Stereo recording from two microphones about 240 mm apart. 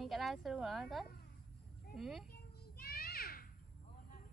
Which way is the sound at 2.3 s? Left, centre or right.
Left.